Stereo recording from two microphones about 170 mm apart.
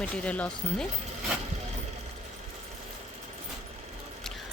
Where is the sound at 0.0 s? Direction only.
10° left (ahead or behind).